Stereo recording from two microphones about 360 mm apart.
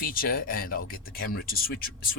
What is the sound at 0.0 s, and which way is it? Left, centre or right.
Speech, left.